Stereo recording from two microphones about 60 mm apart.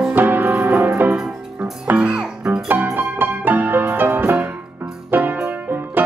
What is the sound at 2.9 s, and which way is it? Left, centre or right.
Music, right.